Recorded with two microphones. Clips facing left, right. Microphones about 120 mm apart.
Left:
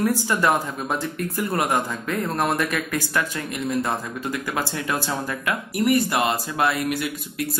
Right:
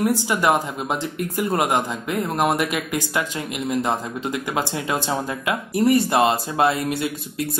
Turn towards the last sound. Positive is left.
turn(degrees=-25)  # may be behind; listen again after turning